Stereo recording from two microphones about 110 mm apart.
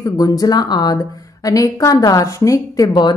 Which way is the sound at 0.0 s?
35° left (ahead or behind).